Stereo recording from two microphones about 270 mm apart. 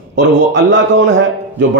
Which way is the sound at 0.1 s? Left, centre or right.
Right.